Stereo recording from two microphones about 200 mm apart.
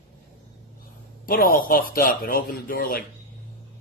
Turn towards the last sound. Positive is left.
turn(degrees=45)  # may be behind; listen again after turning